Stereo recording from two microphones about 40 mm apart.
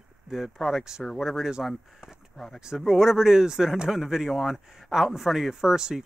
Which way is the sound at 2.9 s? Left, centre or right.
Centre.